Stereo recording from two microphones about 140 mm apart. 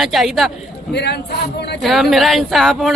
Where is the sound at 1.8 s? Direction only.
Centre (ahead or behind).